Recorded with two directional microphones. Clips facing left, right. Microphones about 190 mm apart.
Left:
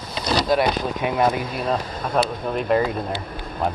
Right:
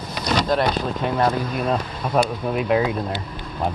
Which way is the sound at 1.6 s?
Centre (ahead or behind).